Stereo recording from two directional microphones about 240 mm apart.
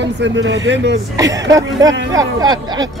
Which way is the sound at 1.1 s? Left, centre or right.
Centre.